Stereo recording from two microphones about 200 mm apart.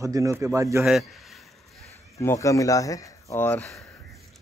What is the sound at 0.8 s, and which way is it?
Speech, centre (ahead or behind).